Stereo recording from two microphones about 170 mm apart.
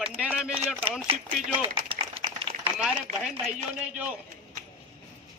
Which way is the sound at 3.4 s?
45° right (ahead or behind).